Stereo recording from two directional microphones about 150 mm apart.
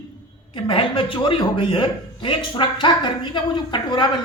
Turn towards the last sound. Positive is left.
turn(degrees=30)  # may be behind; listen again after turning